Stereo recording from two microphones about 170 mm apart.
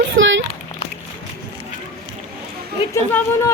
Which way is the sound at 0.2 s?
90° right.